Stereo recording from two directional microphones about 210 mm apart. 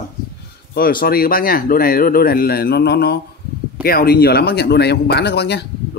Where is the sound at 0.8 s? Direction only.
45° left (ahead or behind).